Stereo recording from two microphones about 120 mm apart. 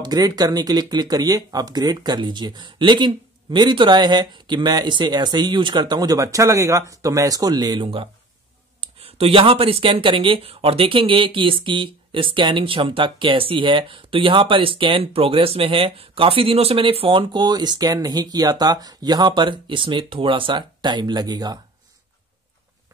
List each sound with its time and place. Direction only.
0.0 s speech: 35° right (ahead or behind)